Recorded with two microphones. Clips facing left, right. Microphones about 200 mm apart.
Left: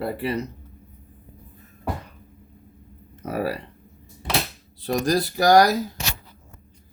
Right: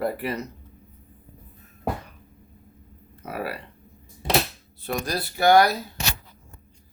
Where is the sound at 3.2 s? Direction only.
40° left (ahead or behind).